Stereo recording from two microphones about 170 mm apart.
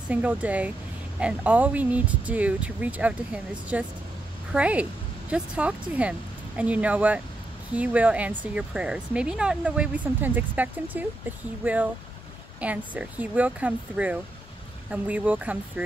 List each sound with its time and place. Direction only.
0.1 s speech: 10° right (ahead or behind)